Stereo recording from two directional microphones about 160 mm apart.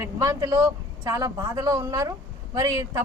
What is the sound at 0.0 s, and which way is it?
A man's voice, 20° right (ahead or behind).